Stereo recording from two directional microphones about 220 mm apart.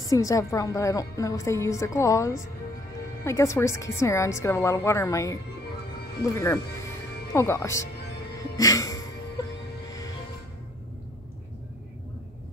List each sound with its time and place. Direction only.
0.1 s a woman's voice: 15° left (ahead or behind)
8.4 s music: 15° left (ahead or behind)